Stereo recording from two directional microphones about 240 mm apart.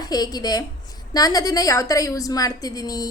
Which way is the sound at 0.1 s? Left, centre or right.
Centre.